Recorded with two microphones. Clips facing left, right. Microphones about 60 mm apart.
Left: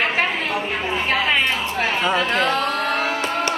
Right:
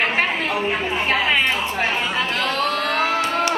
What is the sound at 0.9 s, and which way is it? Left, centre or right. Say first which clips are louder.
Chatter: left 1 dB; centre.